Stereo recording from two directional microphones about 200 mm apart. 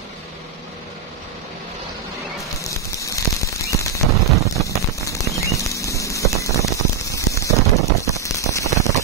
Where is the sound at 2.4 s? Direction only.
15° left (ahead or behind).